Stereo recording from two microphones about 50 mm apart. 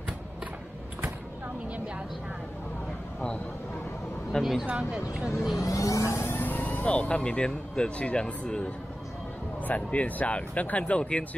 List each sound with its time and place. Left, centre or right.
4.4 s speech: centre
4.7 s speech: centre
5.6 s vehicle: left
6.2 s vehicle: left
6.9 s speech: left
9.6 s speech: left